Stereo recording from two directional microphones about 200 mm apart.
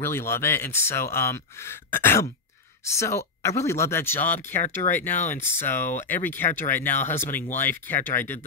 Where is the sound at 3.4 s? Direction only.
15° left (ahead or behind).